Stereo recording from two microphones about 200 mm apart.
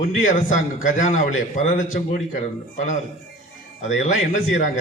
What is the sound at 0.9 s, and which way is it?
A man's voice, 40° left (ahead or behind).